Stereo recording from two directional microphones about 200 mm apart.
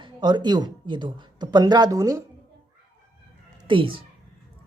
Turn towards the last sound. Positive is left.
turn(degrees=-25)  # may be behind; listen again after turning